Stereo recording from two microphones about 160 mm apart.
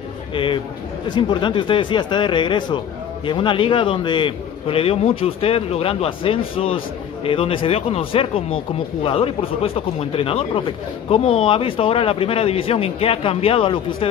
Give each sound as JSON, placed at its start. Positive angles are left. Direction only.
{"t": 0.3, "sound": "a man's voice", "side_deg": 30}